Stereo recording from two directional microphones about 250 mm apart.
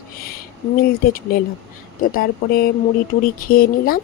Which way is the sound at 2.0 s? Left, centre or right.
Left.